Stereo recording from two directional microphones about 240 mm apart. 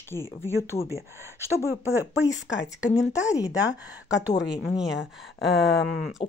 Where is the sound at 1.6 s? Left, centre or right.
Centre.